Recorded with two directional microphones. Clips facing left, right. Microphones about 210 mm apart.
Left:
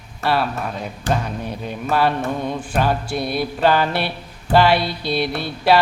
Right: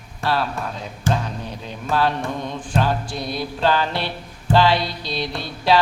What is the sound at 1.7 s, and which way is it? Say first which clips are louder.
Music: left 2 dB; 10° left (ahead or behind).